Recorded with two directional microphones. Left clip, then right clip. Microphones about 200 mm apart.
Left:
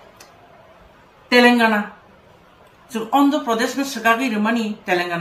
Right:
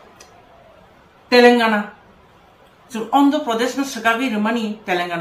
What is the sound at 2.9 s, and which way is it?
Speech, centre (ahead or behind).